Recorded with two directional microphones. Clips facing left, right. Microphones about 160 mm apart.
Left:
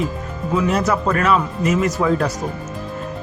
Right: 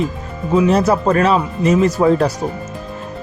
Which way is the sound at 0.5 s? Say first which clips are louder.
Right 5 dB; 30° right (ahead or behind).